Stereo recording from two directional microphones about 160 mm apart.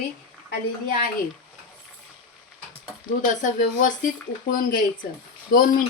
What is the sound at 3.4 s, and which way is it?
Speech, 55° left (ahead or behind).